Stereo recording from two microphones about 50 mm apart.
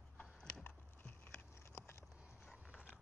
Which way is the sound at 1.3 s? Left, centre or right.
Left.